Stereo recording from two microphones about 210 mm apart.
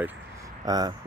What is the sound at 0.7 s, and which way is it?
Speech, 15° right (ahead or behind).